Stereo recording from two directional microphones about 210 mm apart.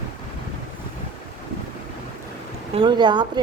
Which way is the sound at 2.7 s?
20° right (ahead or behind).